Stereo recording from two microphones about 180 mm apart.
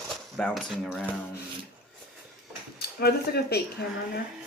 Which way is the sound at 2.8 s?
65° left (ahead or behind).